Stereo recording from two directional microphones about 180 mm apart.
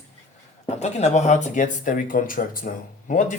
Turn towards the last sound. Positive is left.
turn(degrees=45)  # may be behind; listen again after turning